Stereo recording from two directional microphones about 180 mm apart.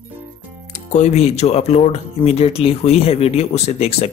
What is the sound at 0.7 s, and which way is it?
Speech, 40° left (ahead or behind).